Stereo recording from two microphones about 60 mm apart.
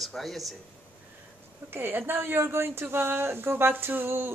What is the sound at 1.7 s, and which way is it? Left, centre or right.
Speech, right.